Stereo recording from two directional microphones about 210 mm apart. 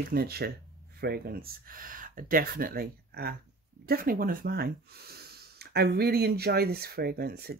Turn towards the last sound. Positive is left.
turn(degrees=-45)  # may be behind; listen again after turning